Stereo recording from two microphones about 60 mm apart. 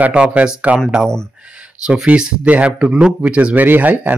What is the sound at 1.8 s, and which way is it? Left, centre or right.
A man's voice, centre.